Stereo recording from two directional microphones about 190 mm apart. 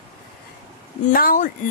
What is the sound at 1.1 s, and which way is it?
Speech, 45° left (ahead or behind).